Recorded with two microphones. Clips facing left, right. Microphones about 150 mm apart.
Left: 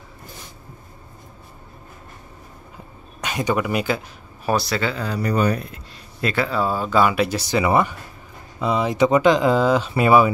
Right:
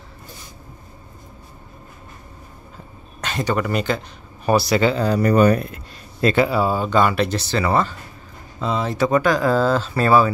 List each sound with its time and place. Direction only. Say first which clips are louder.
3.2 s speech: even; 10° left (ahead or behind)
4.5 s speech: right 4 dB; 10° right (ahead or behind)
4.9 s speech: right 6 dB; 40° right (ahead or behind)
6.3 s speech: right 4 dB; 15° right (ahead or behind)
6.6 s speech: right 1 dB; centre (ahead or behind)